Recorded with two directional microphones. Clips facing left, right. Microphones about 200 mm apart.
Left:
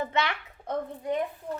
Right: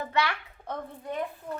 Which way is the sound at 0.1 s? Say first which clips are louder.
Even; 20° left (ahead or behind).